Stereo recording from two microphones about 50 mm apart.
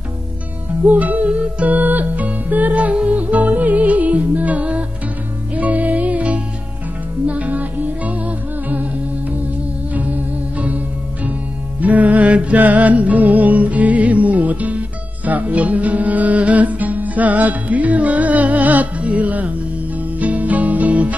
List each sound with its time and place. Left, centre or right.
0.8 s music: right
9.9 s music: right
11.8 s music: right